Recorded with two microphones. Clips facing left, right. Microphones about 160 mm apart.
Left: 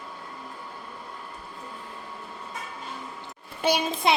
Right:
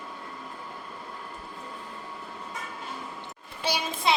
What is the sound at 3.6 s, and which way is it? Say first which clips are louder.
Speech: left 5 dB; 55° left (ahead or behind).